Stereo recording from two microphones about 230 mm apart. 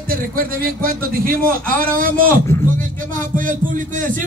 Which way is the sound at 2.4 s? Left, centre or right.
Centre.